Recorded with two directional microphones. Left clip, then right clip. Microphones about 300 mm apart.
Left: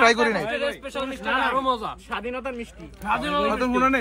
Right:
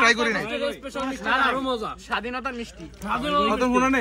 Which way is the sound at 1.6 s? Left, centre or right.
Left.